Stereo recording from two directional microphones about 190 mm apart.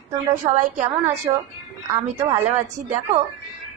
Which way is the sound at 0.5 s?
40° right (ahead or behind).